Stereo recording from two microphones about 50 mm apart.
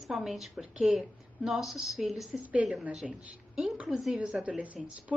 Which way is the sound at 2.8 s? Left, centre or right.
Centre.